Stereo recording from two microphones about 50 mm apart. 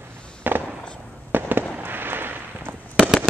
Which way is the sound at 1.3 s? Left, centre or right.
Right.